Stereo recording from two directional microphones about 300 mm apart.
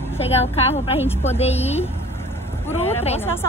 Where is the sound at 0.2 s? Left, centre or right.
Centre.